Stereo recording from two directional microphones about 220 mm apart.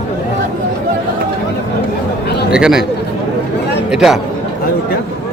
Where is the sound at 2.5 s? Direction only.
5° right (ahead or behind).